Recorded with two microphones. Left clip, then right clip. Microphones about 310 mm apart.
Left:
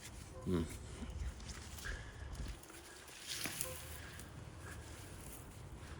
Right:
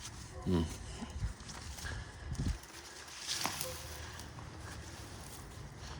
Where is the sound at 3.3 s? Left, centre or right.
Centre.